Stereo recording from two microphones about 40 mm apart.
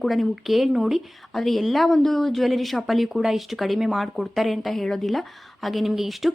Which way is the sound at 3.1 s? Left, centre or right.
Centre.